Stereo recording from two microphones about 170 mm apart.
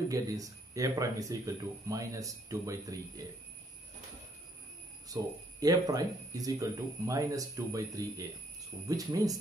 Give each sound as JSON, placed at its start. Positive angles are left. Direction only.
{"t": 0.1, "sound": "speech", "side_deg": -20}
{"t": 5.0, "sound": "speech", "side_deg": -20}